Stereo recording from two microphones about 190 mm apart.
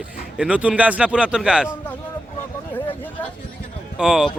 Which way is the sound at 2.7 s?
10° left (ahead or behind).